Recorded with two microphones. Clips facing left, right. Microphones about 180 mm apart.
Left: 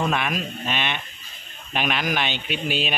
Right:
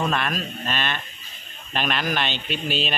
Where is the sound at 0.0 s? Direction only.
10° left (ahead or behind).